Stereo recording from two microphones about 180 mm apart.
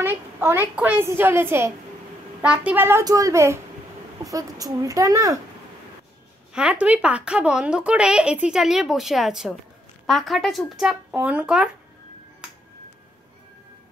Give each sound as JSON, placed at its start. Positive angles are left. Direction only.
{"t": 0.0, "sound": "a woman's voice", "side_deg": -10}
{"t": 6.5, "sound": "a woman's voice", "side_deg": -5}